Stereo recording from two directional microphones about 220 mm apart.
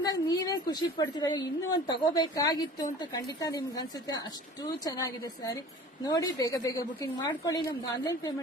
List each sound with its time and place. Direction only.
0.0 s a woman's voice: 15° left (ahead or behind)